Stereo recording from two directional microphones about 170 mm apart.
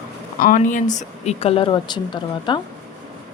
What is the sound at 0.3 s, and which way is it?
Speech, 55° left (ahead or behind).